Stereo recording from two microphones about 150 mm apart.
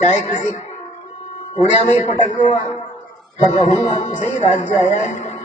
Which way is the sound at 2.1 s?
50° left (ahead or behind).